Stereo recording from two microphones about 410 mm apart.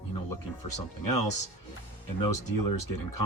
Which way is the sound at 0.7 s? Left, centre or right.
Left.